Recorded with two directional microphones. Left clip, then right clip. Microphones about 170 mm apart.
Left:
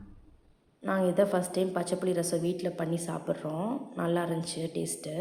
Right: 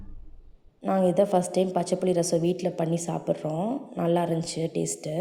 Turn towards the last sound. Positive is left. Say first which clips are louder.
# right 5 dB
turn(degrees=-25)  # may be behind; listen again after turning